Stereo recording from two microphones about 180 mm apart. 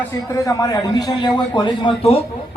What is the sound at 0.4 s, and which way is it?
A man's voice, 20° left (ahead or behind).